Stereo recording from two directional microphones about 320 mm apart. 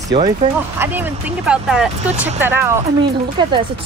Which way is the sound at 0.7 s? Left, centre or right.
Centre.